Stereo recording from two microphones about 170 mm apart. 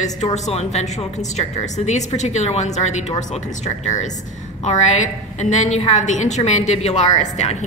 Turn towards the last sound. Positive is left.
turn(degrees=40)  # may be behind; listen again after turning